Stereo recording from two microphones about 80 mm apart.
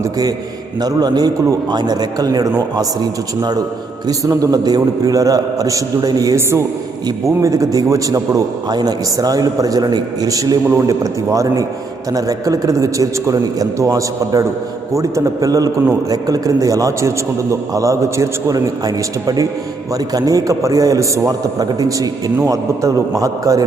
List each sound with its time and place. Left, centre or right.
0.0 s a sound: right
0.8 s a man's voice: right
6.3 s a man's voice: right
7.3 s a man's voice: right
8.7 s a man's voice: right